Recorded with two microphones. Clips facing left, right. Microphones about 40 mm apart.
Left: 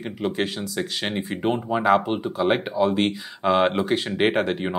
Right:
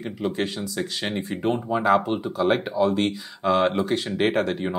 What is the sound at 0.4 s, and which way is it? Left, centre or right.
Speech, centre.